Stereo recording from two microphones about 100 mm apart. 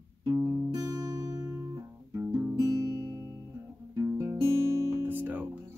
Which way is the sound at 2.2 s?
15° right (ahead or behind).